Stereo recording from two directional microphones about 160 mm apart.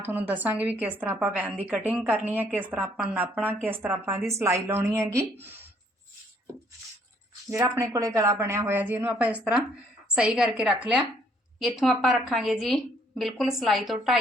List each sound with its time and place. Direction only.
0.0 s a woman's voice: 10° right (ahead or behind)
7.6 s a woman's voice: 20° right (ahead or behind); by 14.2 s centre (ahead or behind)